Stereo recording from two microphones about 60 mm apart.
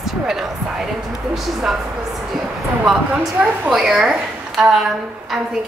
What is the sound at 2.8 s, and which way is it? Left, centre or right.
A woman's voice, centre.